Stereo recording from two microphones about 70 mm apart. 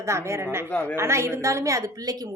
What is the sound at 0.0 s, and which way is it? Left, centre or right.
Speech, right.